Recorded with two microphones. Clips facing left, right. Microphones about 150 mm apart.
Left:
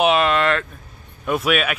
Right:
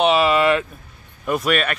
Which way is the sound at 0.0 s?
Centre (ahead or behind).